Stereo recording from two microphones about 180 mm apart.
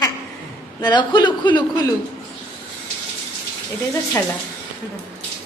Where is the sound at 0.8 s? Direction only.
25° left (ahead or behind).